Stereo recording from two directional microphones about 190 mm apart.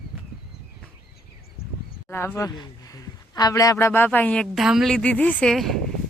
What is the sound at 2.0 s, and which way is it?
Speech, 10° left (ahead or behind).